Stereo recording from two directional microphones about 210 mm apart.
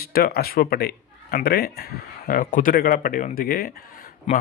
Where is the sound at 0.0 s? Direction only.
45° left (ahead or behind).